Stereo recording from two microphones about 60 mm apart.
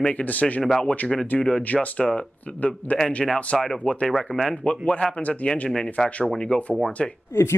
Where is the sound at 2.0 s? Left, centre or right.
Centre.